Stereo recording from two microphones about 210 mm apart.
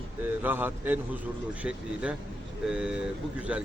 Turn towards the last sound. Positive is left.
turn(degrees=-5)  # may be behind; listen again after turning